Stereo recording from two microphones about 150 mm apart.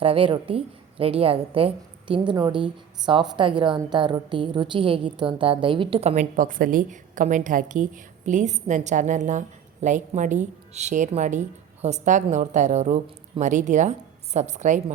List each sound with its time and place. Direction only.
0.0 s a woman's voice: 40° right (ahead or behind)